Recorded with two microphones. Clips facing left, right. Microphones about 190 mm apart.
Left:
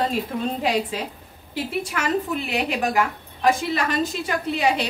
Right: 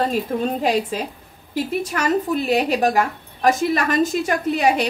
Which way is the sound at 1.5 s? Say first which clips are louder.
Right 4 dB; 40° right (ahead or behind).